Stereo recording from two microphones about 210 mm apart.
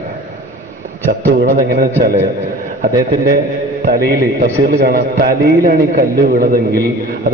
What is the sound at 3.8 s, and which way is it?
A man's voice, 45° right (ahead or behind).